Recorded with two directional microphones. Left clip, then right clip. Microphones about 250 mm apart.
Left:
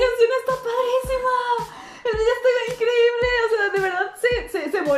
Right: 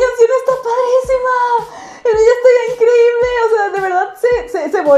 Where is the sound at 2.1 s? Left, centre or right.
Centre.